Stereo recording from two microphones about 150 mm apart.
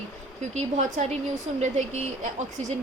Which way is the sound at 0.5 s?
50° right (ahead or behind).